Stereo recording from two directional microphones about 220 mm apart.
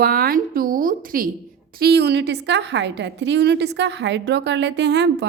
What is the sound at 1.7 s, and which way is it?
A woman's voice, 45° right (ahead or behind).